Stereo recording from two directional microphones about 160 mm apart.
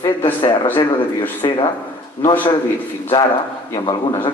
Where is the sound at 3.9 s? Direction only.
30° left (ahead or behind).